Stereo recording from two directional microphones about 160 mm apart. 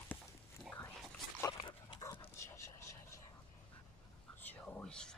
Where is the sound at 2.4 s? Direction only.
20° left (ahead or behind).